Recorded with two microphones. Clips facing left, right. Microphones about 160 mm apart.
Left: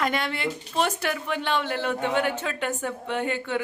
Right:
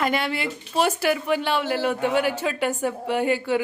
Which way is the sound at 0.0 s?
5° right (ahead or behind).